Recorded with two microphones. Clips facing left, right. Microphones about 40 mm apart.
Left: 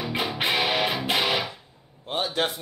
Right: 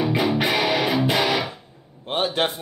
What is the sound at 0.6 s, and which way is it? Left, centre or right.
Music, centre.